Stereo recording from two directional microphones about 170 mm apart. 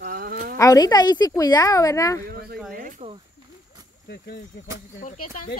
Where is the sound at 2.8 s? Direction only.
50° right (ahead or behind).